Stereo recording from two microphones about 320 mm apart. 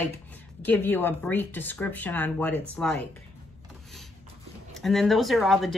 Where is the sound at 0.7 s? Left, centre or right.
Centre.